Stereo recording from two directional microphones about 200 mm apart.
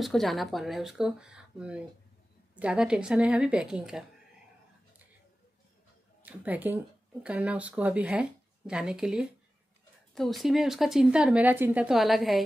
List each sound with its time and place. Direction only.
0.0 s speech: centre (ahead or behind)
6.2 s speech: 10° right (ahead or behind)